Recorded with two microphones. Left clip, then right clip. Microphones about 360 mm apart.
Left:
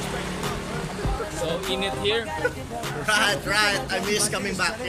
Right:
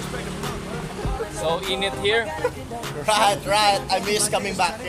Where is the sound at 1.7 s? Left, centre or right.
Centre.